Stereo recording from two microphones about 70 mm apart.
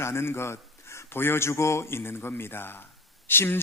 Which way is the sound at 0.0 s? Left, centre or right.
Left.